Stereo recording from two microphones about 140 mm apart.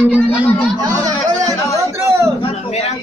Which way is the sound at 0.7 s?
30° right (ahead or behind).